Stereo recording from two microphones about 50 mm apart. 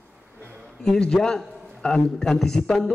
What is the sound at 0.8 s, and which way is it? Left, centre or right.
Speech, centre.